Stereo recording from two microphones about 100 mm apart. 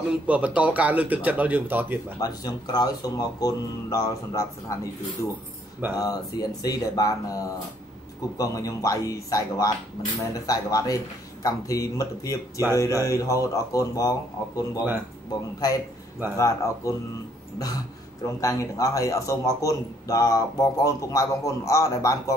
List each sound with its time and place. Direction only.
0.1 s speech: 10° right (ahead or behind)
2.1 s speech: 40° left (ahead or behind)
5.9 s speech: 40° left (ahead or behind)
16.3 s speech: 30° left (ahead or behind)